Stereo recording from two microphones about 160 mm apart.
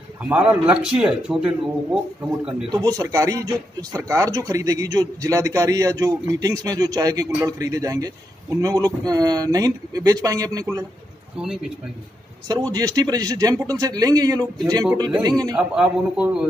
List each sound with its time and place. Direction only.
0.2 s speech: 10° right (ahead or behind)
2.7 s a man's voice: 25° right (ahead or behind)
11.3 s speech: 5° right (ahead or behind)
12.7 s a man's voice: 25° right (ahead or behind)
15.5 s speech: 5° right (ahead or behind)